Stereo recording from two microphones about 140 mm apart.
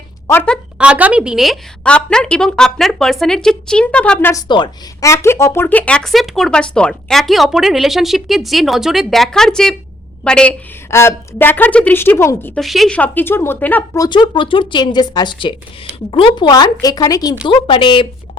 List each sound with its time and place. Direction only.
0.3 s a woman's voice: 10° left (ahead or behind)
0.8 s speech: 10° right (ahead or behind); by 4.4 s 15° left (ahead or behind)
4.4 s speech: 30° left (ahead or behind); by 10.5 s 5° left (ahead or behind)
10.9 s a woman's voice: 15° left (ahead or behind)
12.5 s speech: centre (ahead or behind)
13.0 s a woman's voice: 15° left (ahead or behind)
13.9 s a woman's voice: 30° left (ahead or behind)
17.4 s a woman's voice: 35° left (ahead or behind)